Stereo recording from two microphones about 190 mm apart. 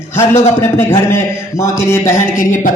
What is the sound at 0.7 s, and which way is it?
A man's voice, 10° left (ahead or behind).